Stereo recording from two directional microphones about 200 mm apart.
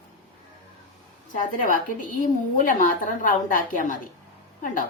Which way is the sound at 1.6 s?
40° left (ahead or behind).